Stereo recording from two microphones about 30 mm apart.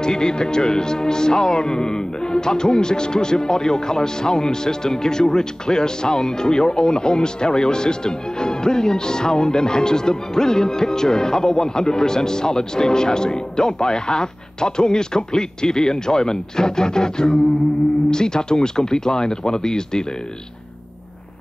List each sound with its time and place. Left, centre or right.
0.0 s speech: left